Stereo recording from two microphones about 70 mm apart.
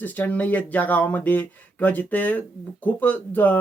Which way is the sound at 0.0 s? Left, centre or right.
Left.